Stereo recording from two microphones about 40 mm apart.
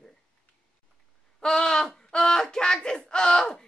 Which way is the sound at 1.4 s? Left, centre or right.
Centre.